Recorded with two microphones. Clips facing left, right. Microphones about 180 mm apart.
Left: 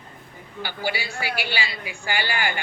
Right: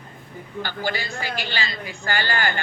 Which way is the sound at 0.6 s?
10° left (ahead or behind).